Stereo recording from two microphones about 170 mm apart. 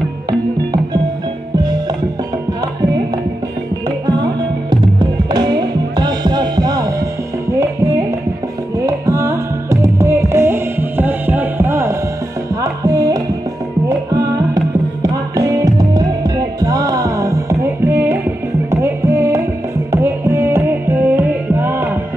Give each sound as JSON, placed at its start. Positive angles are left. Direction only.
{"t": 4.0, "sound": "music", "side_deg": -25}
{"t": 8.7, "sound": "carnatic music", "side_deg": -20}
{"t": 12.6, "sound": "music", "side_deg": -20}
{"t": 14.5, "sound": "music", "side_deg": -20}